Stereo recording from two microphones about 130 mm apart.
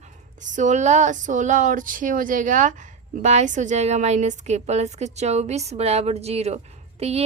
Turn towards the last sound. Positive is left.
turn(degrees=-55)  # may be behind; listen again after turning